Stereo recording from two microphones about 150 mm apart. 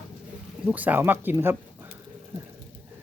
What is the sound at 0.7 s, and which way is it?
Speech, 10° right (ahead or behind).